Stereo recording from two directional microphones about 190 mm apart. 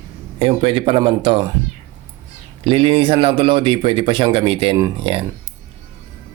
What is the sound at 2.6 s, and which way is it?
Speech, 30° right (ahead or behind).